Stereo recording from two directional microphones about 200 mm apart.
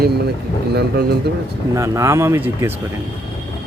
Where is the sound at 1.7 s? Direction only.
15° right (ahead or behind).